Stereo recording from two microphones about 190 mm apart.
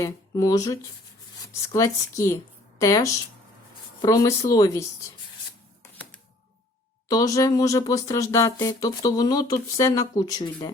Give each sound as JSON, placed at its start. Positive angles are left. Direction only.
{"t": 0.0, "sound": "speech", "side_deg": 20}
{"t": 7.1, "sound": "speech", "side_deg": 15}